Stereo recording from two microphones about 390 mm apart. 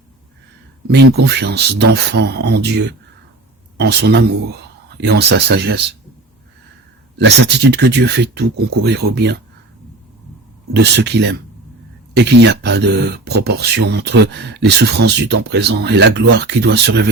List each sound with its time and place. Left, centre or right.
0.9 s speech: right
7.2 s speech: right
10.8 s speech: right